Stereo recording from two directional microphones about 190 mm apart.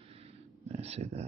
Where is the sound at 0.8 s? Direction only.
35° right (ahead or behind).